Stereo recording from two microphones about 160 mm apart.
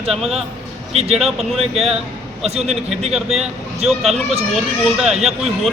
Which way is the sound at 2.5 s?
40° right (ahead or behind).